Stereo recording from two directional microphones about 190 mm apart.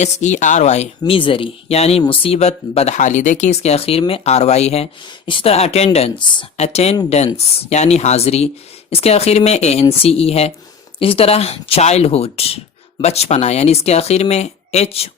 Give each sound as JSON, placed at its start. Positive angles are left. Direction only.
{"t": 0.0, "sound": "speech", "side_deg": 40}